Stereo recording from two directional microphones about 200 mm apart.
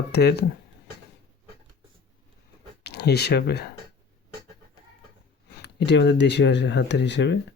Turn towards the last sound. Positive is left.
turn(degrees=60)  # may be behind; listen again after turning